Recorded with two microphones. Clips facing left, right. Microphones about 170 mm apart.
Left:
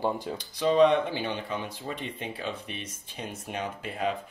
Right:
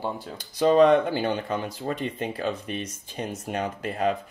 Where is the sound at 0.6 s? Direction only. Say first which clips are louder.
Right 4 dB; 45° right (ahead or behind).